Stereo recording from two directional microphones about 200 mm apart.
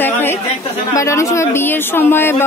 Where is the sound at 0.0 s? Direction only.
10° left (ahead or behind).